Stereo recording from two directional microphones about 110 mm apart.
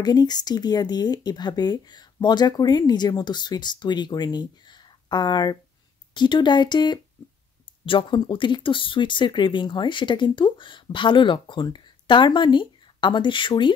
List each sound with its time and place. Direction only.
0.0 s speech: 40° left (ahead or behind)
7.8 s speech: 55° left (ahead or behind)